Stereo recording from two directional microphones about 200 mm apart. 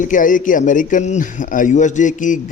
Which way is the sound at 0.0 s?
40° left (ahead or behind).